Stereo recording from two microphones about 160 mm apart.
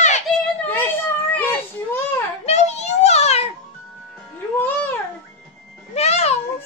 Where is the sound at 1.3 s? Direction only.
10° left (ahead or behind).